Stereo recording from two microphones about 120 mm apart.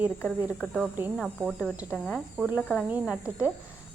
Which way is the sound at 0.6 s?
Centre (ahead or behind).